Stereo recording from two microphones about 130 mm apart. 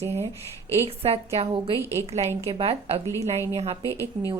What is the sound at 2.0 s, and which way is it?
A woman's voice, 50° right (ahead or behind).